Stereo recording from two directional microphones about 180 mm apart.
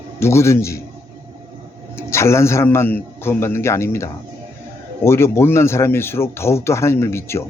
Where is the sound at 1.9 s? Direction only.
15° left (ahead or behind).